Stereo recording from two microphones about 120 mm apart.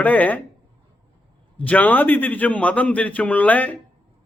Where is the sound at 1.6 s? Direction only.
15° left (ahead or behind).